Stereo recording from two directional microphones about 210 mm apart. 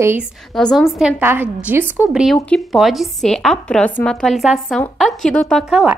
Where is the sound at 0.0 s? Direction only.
10° right (ahead or behind).